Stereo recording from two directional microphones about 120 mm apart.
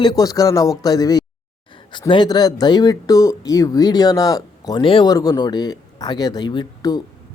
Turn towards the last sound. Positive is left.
turn(degrees=35)  # may be behind; listen again after turning